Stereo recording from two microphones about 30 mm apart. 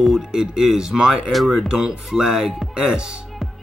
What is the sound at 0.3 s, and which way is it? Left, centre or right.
Speech, centre.